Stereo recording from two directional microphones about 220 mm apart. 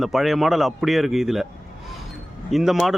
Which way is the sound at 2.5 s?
Centre (ahead or behind).